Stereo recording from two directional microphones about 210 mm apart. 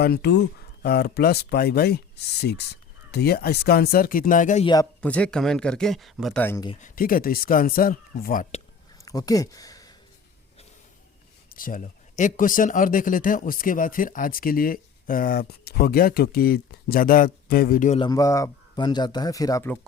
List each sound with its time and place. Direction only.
0.0 s speech: 50° left (ahead or behind)
4.6 s speech: 20° left (ahead or behind)
4.9 s speech: 5° left (ahead or behind)
6.8 s speech: 40° left (ahead or behind)
9.0 s speech: 15° left (ahead or behind)
11.5 s speech: 40° left (ahead or behind)
18.0 s speech: 15° left (ahead or behind)